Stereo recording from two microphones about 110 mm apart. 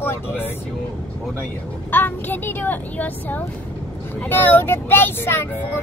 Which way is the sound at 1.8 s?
15° left (ahead or behind).